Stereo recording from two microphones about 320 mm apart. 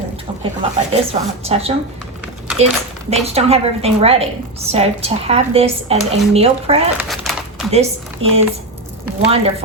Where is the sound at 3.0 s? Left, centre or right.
Centre.